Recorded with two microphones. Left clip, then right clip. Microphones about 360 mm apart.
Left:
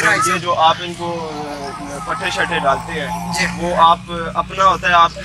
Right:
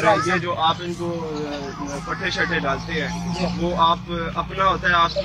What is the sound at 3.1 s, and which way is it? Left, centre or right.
Speech, right.